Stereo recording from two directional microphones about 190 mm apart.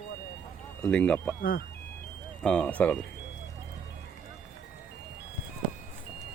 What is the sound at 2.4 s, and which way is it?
Speech, 5° left (ahead or behind).